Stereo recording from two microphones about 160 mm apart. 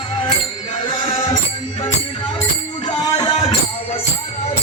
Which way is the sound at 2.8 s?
30° left (ahead or behind).